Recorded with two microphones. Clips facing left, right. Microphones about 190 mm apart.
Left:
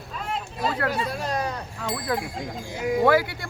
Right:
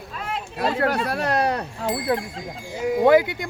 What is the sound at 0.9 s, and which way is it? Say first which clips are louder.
Speech: right 4 dB; 70° right (ahead or behind).